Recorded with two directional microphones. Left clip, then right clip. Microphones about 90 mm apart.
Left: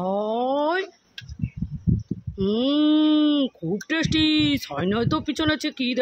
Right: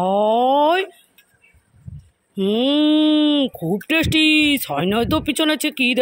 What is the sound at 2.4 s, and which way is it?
Speech, 5° right (ahead or behind).